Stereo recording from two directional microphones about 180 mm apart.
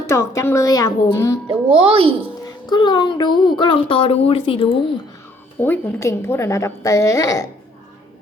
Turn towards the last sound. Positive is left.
turn(degrees=20)  # may be behind; listen again after turning